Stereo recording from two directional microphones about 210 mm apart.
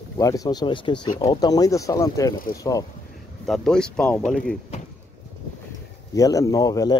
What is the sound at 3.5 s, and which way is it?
Speech, 5° left (ahead or behind).